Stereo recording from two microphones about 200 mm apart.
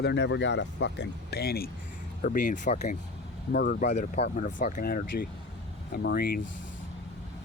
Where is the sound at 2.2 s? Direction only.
40° left (ahead or behind).